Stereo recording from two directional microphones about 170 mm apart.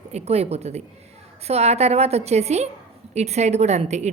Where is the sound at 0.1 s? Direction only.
40° right (ahead or behind).